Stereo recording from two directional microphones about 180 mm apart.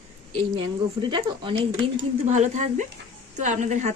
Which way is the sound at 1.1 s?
25° right (ahead or behind).